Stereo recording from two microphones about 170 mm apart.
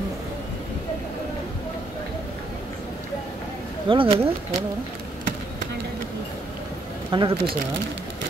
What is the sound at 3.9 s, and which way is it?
Speech, 30° right (ahead or behind).